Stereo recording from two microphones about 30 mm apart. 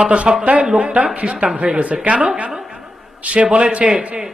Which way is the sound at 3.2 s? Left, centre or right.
Right.